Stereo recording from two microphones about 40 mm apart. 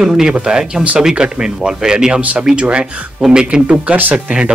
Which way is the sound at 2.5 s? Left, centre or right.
Right.